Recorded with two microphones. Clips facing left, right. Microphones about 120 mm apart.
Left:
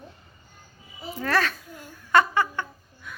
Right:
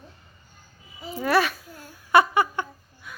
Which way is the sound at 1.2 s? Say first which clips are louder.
Right 3 dB; 10° right (ahead or behind).